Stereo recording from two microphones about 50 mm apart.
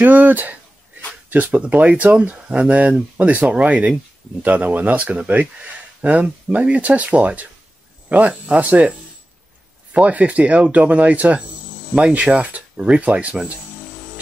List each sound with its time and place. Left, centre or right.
0.0 s speech: right
9.9 s speech: right